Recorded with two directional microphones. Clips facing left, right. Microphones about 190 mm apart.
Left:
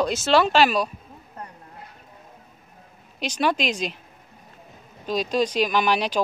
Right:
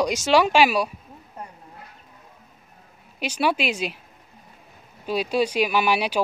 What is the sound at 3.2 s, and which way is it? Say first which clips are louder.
Speech: even; 10° right (ahead or behind).